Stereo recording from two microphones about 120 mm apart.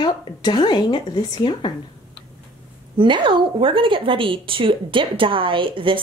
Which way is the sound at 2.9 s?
45° right (ahead or behind).